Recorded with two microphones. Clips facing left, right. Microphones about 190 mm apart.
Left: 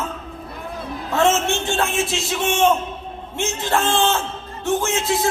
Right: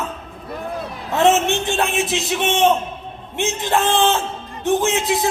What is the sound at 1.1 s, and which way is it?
A man's voice, 20° right (ahead or behind).